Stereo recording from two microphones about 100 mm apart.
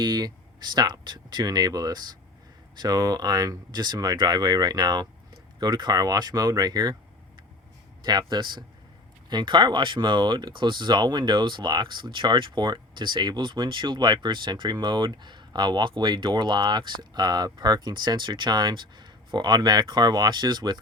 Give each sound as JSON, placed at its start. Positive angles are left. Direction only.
{"t": 0.0, "sound": "speech", "side_deg": -45}
{"t": 8.0, "sound": "speech", "side_deg": -45}